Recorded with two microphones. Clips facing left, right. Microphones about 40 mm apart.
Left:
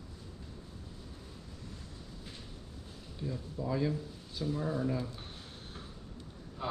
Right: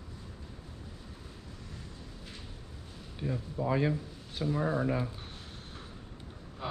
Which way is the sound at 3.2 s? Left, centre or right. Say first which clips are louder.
Right 4 dB; right.